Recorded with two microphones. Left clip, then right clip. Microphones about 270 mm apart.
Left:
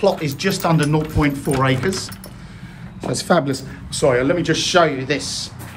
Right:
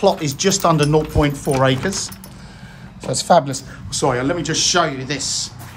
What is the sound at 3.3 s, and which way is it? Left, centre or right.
Speech, centre.